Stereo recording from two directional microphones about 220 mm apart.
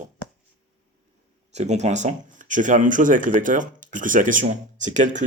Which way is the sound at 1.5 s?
30° right (ahead or behind).